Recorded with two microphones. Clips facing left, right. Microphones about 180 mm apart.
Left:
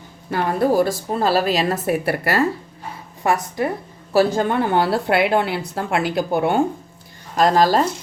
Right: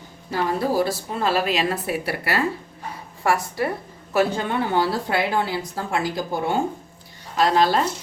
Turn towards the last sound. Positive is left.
turn(degrees=40)  # may be behind; listen again after turning